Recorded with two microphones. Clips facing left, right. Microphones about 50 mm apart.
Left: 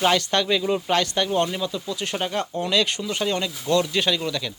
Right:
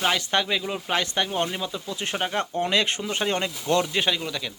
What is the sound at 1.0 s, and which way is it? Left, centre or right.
Speech, centre.